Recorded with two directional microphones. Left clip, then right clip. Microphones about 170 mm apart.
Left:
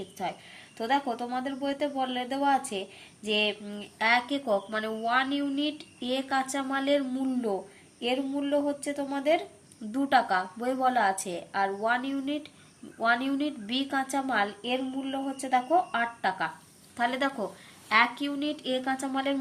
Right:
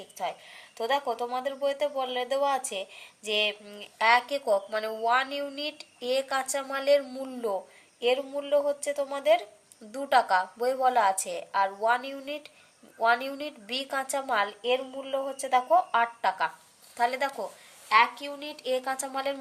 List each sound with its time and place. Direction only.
0.8 s speech: 45° right (ahead or behind)
17.0 s speech: 30° right (ahead or behind)